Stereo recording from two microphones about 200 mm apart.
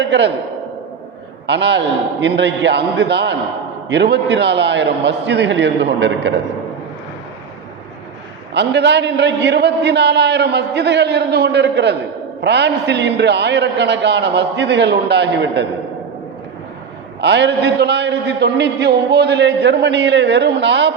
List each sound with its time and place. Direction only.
0.0 s a man's voice: 60° right (ahead or behind)
1.5 s a man's voice: 60° right (ahead or behind)
8.5 s a man's voice: 60° right (ahead or behind)
17.2 s a man's voice: 60° right (ahead or behind)